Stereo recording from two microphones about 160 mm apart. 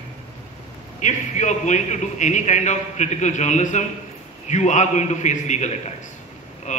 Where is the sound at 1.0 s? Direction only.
50° left (ahead or behind).